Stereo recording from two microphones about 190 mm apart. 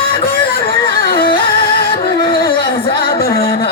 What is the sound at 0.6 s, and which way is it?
Music, 30° left (ahead or behind).